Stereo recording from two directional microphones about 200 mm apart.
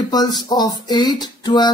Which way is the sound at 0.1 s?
20° left (ahead or behind).